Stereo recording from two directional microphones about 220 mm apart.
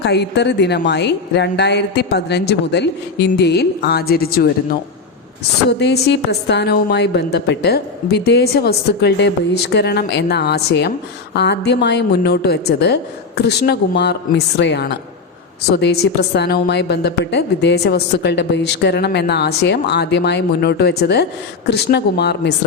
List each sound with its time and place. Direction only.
0.0 s a woman's voice: 50° left (ahead or behind)
5.8 s a woman's voice: 50° left (ahead or behind)